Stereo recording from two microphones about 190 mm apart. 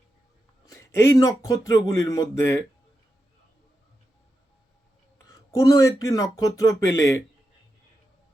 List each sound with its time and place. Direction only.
0.7 s speech: 15° left (ahead or behind)
5.5 s speech: 20° left (ahead or behind)